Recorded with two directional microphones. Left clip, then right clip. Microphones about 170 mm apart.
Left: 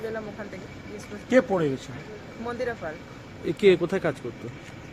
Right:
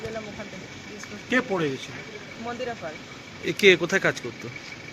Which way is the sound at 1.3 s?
90° left.